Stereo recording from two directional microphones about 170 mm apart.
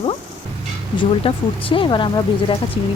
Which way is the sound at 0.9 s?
30° left (ahead or behind).